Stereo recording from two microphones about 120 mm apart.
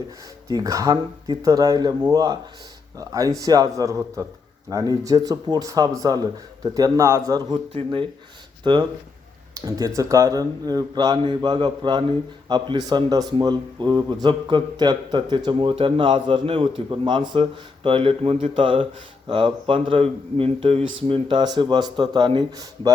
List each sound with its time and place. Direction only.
0.4 s speech: 30° right (ahead or behind)
7.5 s speech: 45° right (ahead or behind)
9.6 s speech: 30° right (ahead or behind)